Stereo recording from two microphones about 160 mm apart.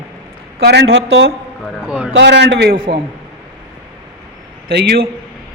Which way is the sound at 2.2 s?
90° right.